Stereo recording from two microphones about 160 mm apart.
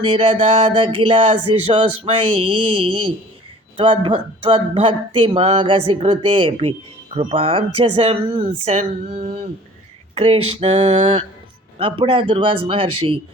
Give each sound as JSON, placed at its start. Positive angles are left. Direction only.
{"t": 0.0, "sound": "speech", "side_deg": -35}
{"t": 8.7, "sound": "a sound", "side_deg": -45}
{"t": 10.2, "sound": "speech", "side_deg": -35}